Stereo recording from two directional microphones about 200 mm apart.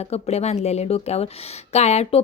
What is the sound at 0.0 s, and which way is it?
A woman's voice, 30° left (ahead or behind).